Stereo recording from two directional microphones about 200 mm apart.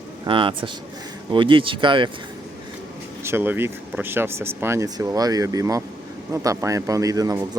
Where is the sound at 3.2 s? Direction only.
10° right (ahead or behind).